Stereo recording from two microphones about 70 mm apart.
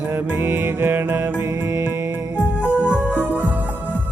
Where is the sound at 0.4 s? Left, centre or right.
Right.